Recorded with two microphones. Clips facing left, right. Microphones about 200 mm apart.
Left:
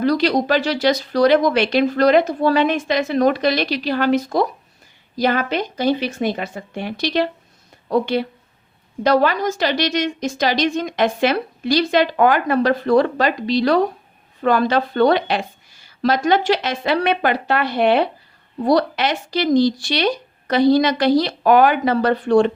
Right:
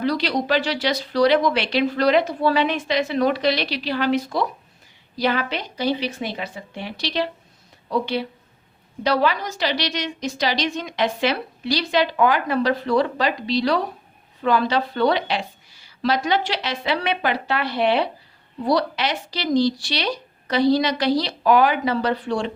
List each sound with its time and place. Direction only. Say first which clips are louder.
0.0 s a woman's voice: left 5 dB; 45° left (ahead or behind)